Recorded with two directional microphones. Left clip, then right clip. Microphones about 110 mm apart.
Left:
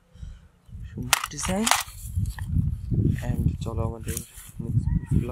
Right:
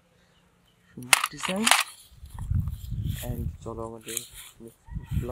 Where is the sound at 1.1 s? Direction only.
5° left (ahead or behind).